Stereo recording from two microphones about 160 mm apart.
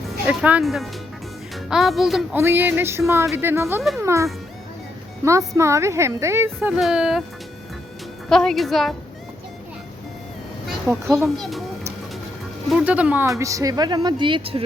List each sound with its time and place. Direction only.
0.3 s a woman's voice: 10° right (ahead or behind)
2.3 s a woman's voice: 15° right (ahead or behind)
8.3 s a woman's voice: 5° left (ahead or behind)
10.8 s a woman's voice: 15° right (ahead or behind)
12.7 s a woman's voice: 10° right (ahead or behind)
13.4 s speech: 20° right (ahead or behind)